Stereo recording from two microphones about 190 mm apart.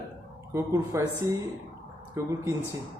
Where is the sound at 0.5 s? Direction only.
15° right (ahead or behind).